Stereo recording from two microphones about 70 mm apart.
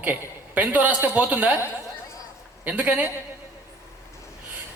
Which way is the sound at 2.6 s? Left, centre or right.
Right.